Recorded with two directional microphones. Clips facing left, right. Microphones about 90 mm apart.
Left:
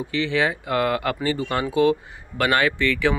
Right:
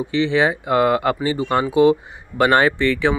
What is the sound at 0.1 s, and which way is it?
Speech, 25° right (ahead or behind).